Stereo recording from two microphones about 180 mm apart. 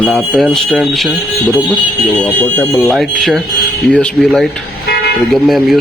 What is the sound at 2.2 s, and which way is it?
A man's voice, 10° left (ahead or behind).